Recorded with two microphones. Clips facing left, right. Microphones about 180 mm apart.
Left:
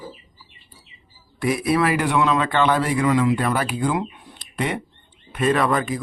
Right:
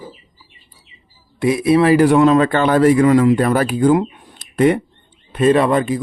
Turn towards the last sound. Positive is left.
turn(degrees=-30)  # may be behind; listen again after turning